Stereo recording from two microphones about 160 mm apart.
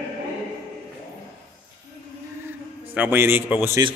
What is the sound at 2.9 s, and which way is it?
Speech, 10° right (ahead or behind).